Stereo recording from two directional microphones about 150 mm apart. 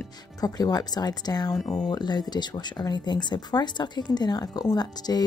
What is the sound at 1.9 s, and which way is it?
Speech, 30° left (ahead or behind).